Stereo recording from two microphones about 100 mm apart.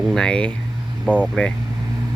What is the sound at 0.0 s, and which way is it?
Speech, 5° left (ahead or behind).